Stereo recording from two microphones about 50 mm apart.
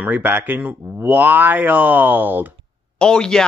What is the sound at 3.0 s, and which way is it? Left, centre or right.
Speech, centre.